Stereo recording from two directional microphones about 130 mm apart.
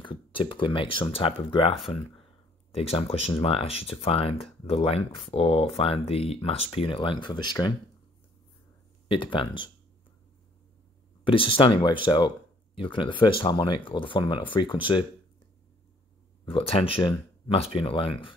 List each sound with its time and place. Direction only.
0.0 s speech: 40° left (ahead or behind)
9.1 s speech: 40° left (ahead or behind)
11.2 s speech: 45° left (ahead or behind)
16.4 s speech: 45° left (ahead or behind)